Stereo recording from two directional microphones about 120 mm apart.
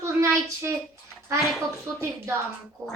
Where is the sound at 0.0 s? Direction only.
25° right (ahead or behind).